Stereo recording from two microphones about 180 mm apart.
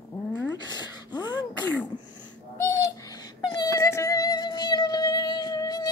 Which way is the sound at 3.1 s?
20° left (ahead or behind).